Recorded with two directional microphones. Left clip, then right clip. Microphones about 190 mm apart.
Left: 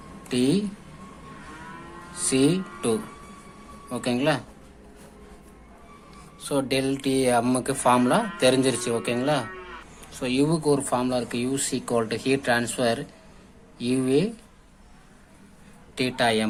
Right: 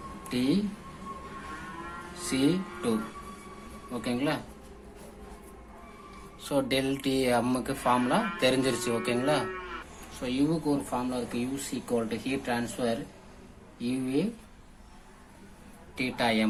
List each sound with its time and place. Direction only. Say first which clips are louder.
0.3 s a woman's voice: left 6 dB; 40° left (ahead or behind)
2.3 s speech: left 5 dB; 35° left (ahead or behind)
3.9 s speech: left 6 dB; 40° left (ahead or behind)
6.4 s speech: left 3 dB; 25° left (ahead or behind)
10.2 s speech: left 5 dB; 40° left (ahead or behind)
16.0 s speech: left 5 dB; 40° left (ahead or behind)